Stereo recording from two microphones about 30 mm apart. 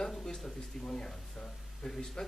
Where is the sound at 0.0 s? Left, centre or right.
Centre.